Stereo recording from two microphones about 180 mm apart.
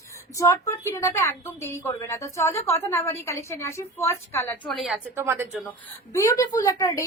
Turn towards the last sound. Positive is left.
turn(degrees=15)  # may be behind; listen again after turning